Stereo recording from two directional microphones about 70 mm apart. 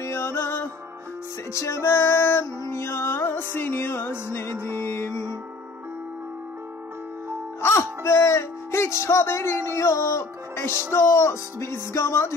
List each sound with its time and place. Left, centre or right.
0.0 s music: left
1.5 s music: left
7.6 s speech: left